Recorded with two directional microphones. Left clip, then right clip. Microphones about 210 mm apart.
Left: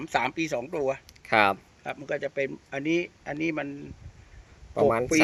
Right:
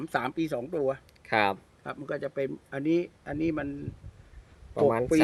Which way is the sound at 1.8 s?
35° right (ahead or behind).